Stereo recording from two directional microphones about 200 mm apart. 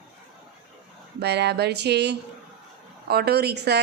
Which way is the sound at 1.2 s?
55° right (ahead or behind).